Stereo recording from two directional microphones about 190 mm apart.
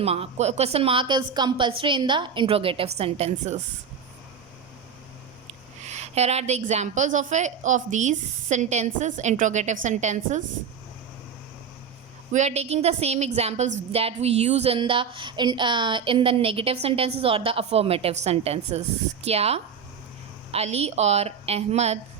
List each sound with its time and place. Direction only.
0.0 s a woman's voice: 30° right (ahead or behind)
5.8 s a woman's voice: 35° right (ahead or behind)
12.3 s a woman's voice: 35° right (ahead or behind)